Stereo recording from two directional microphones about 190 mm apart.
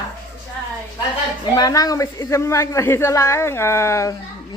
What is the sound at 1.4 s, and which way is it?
Speech, 20° left (ahead or behind).